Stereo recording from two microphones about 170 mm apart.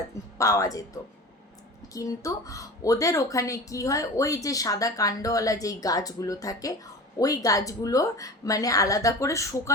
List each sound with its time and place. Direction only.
0.3 s a woman's voice: 20° left (ahead or behind)
1.9 s a woman's voice: 20° left (ahead or behind)